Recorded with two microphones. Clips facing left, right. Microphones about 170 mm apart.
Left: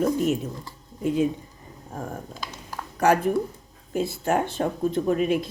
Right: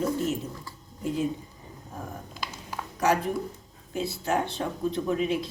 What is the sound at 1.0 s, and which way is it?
Speech, 65° left (ahead or behind).